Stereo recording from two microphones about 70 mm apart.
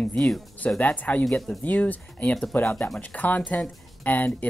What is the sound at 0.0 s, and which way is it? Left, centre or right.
Speech, centre.